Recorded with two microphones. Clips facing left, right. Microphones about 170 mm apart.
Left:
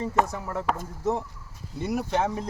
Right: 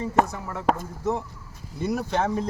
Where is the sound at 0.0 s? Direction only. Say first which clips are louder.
Right 2 dB; 40° left (ahead or behind).